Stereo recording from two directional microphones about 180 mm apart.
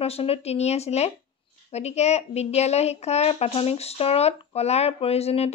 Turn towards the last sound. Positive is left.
turn(degrees=35)  # may be behind; listen again after turning